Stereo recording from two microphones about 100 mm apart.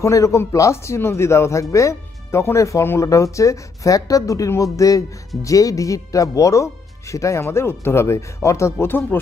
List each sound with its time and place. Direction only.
0.0 s speech: 30° left (ahead or behind)